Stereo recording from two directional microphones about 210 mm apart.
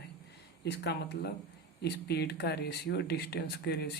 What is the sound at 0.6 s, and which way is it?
Speech, 50° left (ahead or behind).